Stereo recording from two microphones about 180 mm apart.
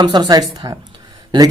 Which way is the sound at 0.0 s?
25° right (ahead or behind).